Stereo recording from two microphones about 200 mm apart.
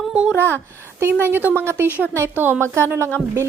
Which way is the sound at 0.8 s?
10° right (ahead or behind).